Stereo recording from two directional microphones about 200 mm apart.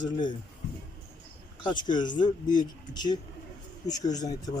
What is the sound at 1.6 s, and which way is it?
Speech, 20° left (ahead or behind).